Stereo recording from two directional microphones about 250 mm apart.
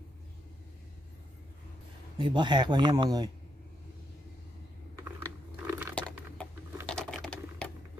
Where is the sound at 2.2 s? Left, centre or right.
Centre.